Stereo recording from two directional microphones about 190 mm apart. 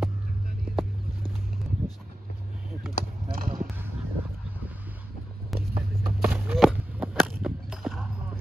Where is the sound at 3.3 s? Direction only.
45° right (ahead or behind).